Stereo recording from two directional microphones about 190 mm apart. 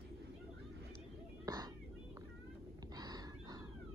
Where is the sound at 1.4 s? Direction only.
20° right (ahead or behind).